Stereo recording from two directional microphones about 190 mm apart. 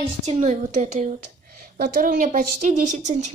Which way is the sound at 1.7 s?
55° right (ahead or behind).